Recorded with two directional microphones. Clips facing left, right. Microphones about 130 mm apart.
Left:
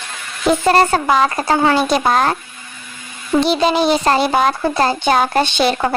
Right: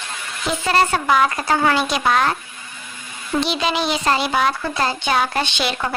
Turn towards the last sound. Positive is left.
turn(degrees=40)  # may be behind; listen again after turning